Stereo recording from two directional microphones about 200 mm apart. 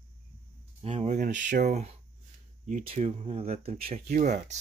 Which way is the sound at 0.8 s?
30° right (ahead or behind).